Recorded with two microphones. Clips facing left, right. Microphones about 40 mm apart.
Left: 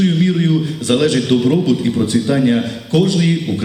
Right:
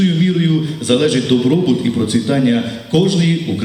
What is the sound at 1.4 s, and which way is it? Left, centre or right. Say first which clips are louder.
A man's voice: right 1 dB; centre.